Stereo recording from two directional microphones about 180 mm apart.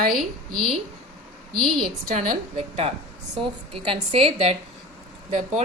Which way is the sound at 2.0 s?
40° right (ahead or behind).